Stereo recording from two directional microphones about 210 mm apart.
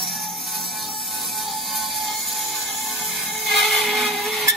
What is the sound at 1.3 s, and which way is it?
Ratchet, centre (ahead or behind).